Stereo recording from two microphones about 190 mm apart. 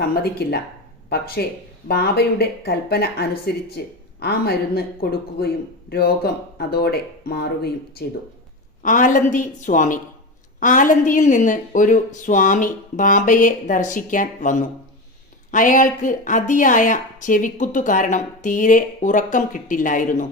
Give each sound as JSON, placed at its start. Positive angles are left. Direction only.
{"t": 0.0, "sound": "speech", "side_deg": 55}
{"t": 8.8, "sound": "a woman's voice", "side_deg": 45}